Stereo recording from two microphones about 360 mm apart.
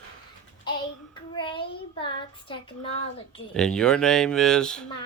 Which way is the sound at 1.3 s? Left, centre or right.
Centre.